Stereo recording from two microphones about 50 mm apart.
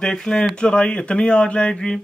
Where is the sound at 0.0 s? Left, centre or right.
Centre.